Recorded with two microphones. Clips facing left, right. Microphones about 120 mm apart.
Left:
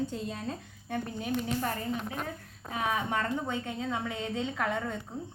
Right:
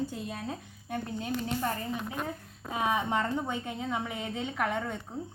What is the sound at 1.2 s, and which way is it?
Speech, 25° right (ahead or behind).